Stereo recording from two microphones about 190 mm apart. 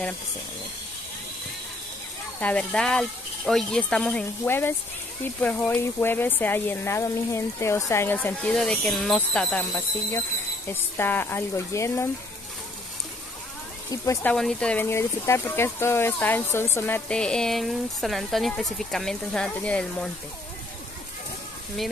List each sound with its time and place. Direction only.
2.4 s speech: 5° left (ahead or behind)
13.8 s speech: 15° left (ahead or behind)
14.3 s speech: 5° left (ahead or behind)